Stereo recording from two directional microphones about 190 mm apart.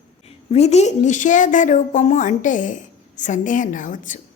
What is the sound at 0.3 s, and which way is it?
A woman's voice, 35° left (ahead or behind).